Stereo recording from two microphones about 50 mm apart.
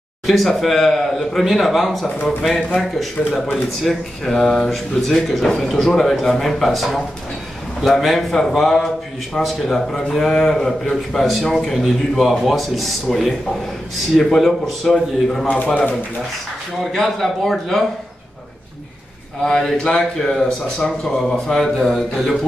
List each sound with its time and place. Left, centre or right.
0.3 s speech: centre
8.0 s a man's voice: centre
15.4 s a man's voice: left
16.9 s a man's voice: centre
19.4 s a man's voice: centre